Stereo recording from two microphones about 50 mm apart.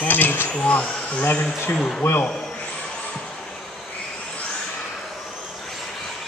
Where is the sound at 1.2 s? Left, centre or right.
Left.